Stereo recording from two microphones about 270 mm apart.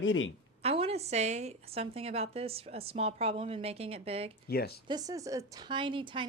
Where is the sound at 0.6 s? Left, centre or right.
Right.